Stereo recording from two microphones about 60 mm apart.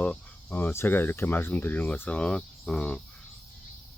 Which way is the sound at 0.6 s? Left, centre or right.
Left.